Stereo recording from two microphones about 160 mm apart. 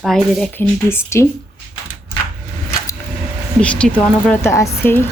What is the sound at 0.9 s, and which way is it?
Speech, 15° left (ahead or behind).